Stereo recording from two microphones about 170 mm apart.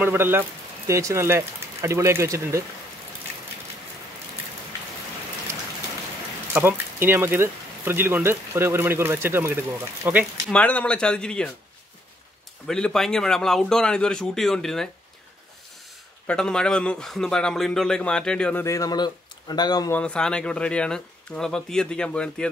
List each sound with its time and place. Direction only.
0.0 s speech: 10° right (ahead or behind)
6.5 s speech: 10° right (ahead or behind)
10.5 s a man's voice: 10° left (ahead or behind)
12.6 s a man's voice: 5° left (ahead or behind)
16.3 s a man's voice: 5° left (ahead or behind); by 19.9 s 25° left (ahead or behind)
19.9 s a man's voice: 5° left (ahead or behind)